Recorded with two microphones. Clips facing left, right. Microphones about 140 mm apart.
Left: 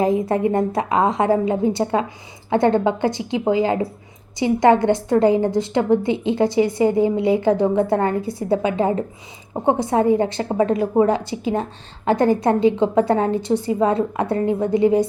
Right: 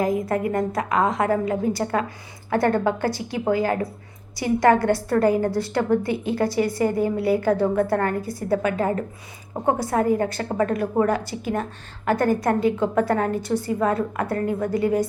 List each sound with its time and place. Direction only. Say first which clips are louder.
0.0 s a woman's voice: left 4 dB; 25° left (ahead or behind)